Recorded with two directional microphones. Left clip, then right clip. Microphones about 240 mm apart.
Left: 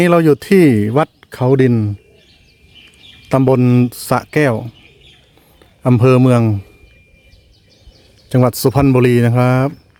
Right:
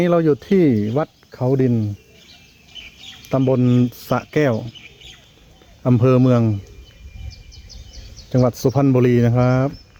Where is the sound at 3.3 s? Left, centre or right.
Left.